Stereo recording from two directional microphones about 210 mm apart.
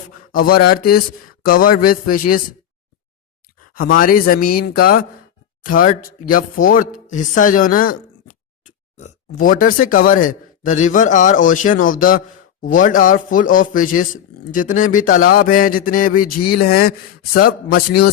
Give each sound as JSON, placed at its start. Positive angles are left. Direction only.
{"t": 0.3, "sound": "speech", "side_deg": 45}
{"t": 3.9, "sound": "a man's voice", "side_deg": 45}